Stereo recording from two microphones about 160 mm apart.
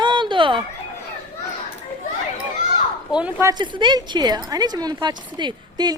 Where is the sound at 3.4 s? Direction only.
25° right (ahead or behind).